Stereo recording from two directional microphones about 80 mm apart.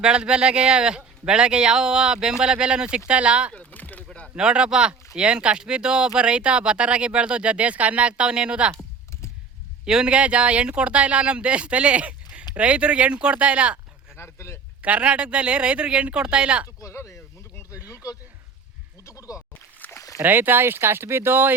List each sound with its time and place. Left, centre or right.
0.0 s speech: centre
3.5 s a sound: centre
4.4 s speech: centre
9.8 s speech: centre
14.2 s speech: left
14.8 s speech: centre
16.6 s a sound: left
19.8 s rowboat: left
20.2 s speech: right